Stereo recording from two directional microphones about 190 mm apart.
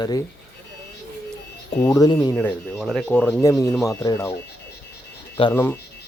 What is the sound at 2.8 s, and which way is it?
Speech, 5° left (ahead or behind).